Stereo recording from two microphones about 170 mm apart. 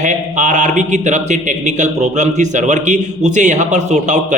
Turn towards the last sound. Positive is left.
turn(degrees=-45)  # may be behind; listen again after turning